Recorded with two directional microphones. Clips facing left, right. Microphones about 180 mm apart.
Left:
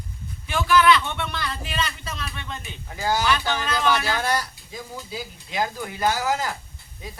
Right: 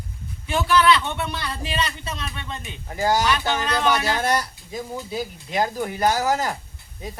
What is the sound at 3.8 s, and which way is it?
Speech, 20° right (ahead or behind).